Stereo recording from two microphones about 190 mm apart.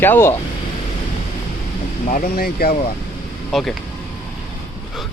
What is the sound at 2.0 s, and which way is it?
Speech, 45° left (ahead or behind).